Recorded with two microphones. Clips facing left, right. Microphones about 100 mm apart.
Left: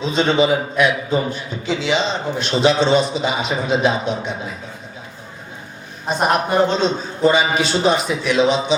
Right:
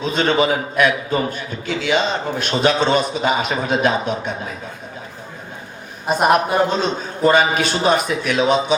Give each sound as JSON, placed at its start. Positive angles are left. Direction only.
{"t": 0.0, "sound": "a man's voice", "side_deg": -50}
{"t": 6.1, "sound": "a man's voice", "side_deg": -5}
{"t": 7.3, "sound": "a man's voice", "side_deg": -50}